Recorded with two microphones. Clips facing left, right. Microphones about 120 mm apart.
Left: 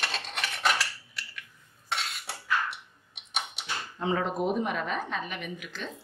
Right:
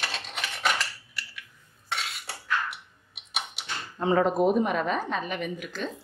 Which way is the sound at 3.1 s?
5° right (ahead or behind).